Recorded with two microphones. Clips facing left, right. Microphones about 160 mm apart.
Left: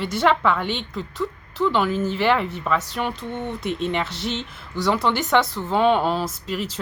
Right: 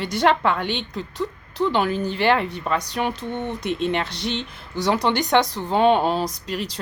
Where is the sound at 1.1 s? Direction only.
20° right (ahead or behind).